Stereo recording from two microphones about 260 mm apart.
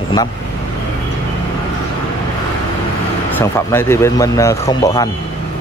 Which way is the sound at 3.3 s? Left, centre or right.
Centre.